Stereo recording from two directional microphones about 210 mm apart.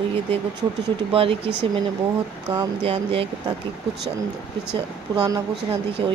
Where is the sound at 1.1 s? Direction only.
25° right (ahead or behind).